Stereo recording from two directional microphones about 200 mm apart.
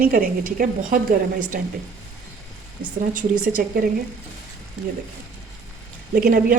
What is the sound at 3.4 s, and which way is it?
Speech, 45° right (ahead or behind).